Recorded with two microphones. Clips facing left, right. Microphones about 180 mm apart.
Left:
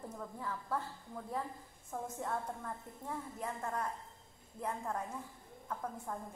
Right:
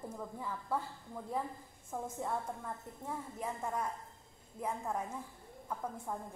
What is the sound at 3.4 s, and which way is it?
A woman's voice, 10° right (ahead or behind).